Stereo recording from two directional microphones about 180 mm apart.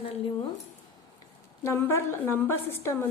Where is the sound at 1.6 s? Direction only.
15° left (ahead or behind).